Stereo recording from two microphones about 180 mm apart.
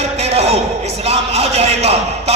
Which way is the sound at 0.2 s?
35° right (ahead or behind).